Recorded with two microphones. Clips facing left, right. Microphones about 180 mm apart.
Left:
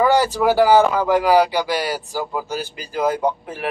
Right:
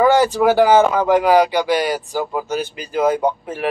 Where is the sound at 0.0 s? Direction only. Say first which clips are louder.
Right 3 dB; 20° right (ahead or behind).